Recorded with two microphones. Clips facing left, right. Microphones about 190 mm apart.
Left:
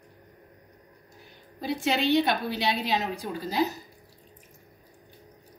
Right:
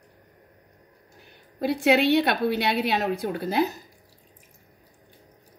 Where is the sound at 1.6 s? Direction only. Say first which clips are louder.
Right 6 dB; 65° right (ahead or behind).